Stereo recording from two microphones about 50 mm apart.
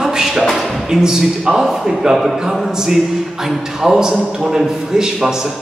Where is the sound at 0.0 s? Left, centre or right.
Centre.